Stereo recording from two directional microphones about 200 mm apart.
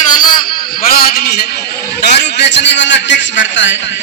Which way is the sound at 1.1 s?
50° left (ahead or behind).